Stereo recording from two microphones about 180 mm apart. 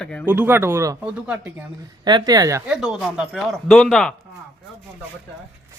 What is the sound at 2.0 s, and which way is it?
Speech, 25° right (ahead or behind).